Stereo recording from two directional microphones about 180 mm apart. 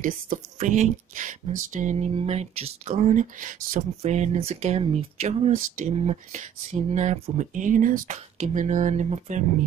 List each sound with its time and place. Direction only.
0.0 s speech: 45° right (ahead or behind)
3.9 s speech: 35° right (ahead or behind)